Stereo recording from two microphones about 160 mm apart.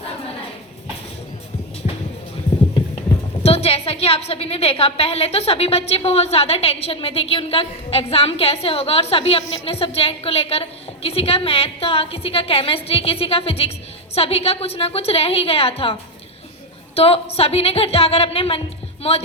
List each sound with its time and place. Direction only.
3.4 s a woman's voice: 40° left (ahead or behind)